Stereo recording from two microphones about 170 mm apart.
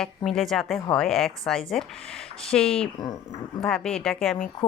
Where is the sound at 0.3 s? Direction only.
Centre (ahead or behind).